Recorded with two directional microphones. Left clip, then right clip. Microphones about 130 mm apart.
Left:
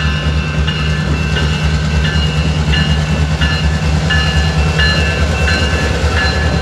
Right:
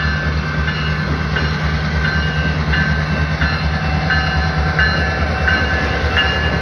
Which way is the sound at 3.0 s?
60° left (ahead or behind).